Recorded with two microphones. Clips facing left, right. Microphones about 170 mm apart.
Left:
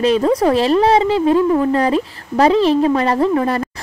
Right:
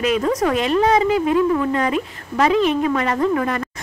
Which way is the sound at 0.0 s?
30° left (ahead or behind).